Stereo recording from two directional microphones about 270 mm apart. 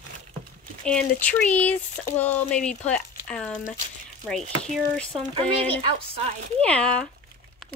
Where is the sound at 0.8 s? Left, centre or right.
Centre.